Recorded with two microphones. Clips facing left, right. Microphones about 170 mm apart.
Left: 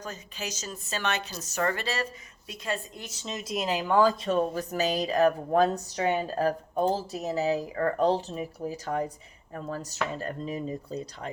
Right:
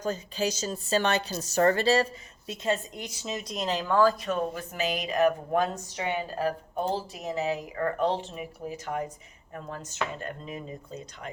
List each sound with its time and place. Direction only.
0.0 s a woman's voice: 30° right (ahead or behind); by 3.3 s 10° right (ahead or behind)
3.3 s speech: 5° left (ahead or behind)
4.2 s speech: 35° left (ahead or behind)